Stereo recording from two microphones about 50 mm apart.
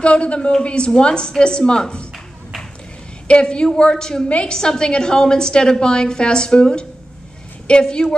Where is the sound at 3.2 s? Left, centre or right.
Centre.